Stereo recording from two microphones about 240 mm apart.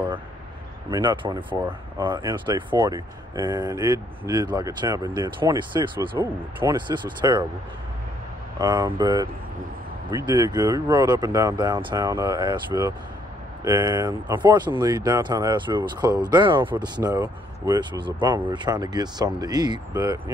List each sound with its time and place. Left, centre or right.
0.8 s speech: centre
8.5 s speech: centre